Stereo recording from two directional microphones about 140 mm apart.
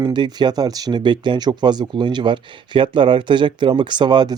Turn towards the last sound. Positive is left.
turn(degrees=-30)  # may be behind; listen again after turning